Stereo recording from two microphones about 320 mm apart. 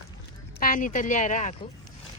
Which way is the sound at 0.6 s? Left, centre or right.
Left.